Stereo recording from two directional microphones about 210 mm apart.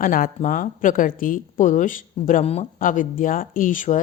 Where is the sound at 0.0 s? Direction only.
40° left (ahead or behind).